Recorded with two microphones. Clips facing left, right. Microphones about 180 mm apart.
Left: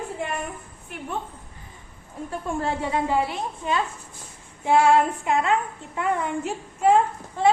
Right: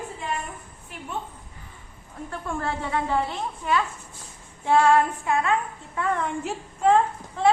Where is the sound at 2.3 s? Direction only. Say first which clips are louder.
Left 3 dB; 15° left (ahead or behind).